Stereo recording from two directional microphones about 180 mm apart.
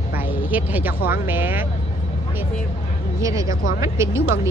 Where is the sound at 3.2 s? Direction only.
20° right (ahead or behind).